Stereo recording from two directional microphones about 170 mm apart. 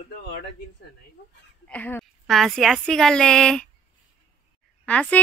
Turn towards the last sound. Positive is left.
turn(degrees=5)  # may be behind; listen again after turning